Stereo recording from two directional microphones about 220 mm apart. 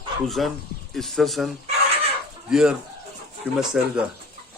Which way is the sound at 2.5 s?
Centre (ahead or behind).